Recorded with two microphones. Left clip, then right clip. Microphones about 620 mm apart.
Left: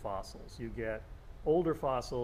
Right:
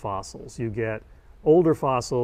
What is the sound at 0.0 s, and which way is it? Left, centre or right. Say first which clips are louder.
Speech: right 9 dB; right.